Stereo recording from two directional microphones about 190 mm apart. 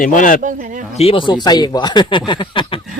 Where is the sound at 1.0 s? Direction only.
30° left (ahead or behind).